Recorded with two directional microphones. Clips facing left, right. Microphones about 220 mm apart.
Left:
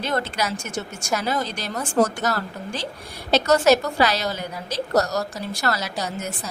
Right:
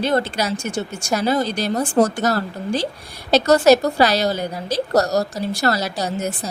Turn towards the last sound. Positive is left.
turn(degrees=-35)  # may be behind; listen again after turning